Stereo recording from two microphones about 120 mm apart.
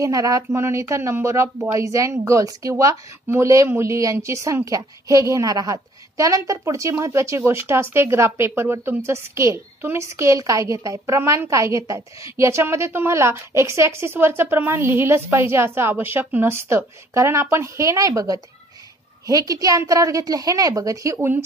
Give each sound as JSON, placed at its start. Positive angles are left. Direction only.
{"t": 0.0, "sound": "a woman's voice", "side_deg": -30}